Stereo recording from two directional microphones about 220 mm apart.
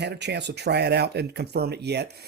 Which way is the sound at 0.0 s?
50° right (ahead or behind).